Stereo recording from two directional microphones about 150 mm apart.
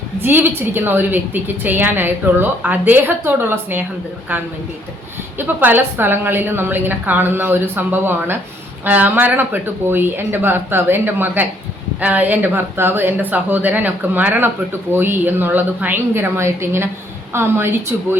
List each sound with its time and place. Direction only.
0.2 s a woman's voice: 15° right (ahead or behind)
5.4 s a woman's voice: 15° right (ahead or behind)